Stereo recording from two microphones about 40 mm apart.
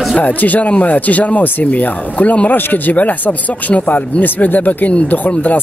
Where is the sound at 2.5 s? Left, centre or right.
Left.